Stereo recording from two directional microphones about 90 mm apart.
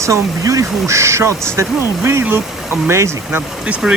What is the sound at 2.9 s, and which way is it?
Speech, 30° right (ahead or behind).